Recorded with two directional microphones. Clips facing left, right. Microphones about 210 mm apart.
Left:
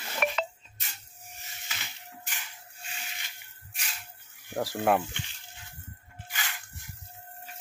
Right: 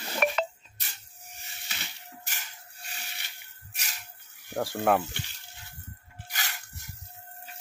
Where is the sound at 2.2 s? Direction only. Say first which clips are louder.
Left 1 dB; 40° right (ahead or behind).